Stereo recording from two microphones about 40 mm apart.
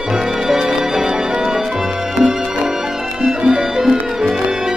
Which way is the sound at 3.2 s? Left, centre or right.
Centre.